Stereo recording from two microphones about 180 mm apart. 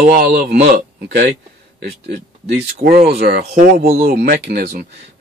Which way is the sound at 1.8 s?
60° right (ahead or behind).